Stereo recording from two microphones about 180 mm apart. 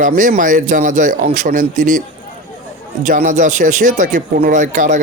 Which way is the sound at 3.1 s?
45° right (ahead or behind).